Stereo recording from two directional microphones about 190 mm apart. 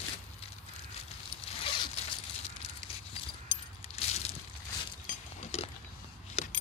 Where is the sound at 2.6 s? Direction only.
35° left (ahead or behind).